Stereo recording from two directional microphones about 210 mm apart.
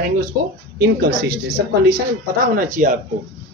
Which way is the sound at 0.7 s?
50° right (ahead or behind).